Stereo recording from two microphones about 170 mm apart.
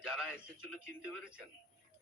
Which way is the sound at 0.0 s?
5° right (ahead or behind).